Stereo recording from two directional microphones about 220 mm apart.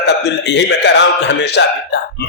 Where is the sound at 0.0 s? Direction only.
50° left (ahead or behind).